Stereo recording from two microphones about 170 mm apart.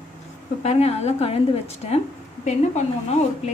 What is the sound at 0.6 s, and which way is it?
A woman's voice, 40° left (ahead or behind).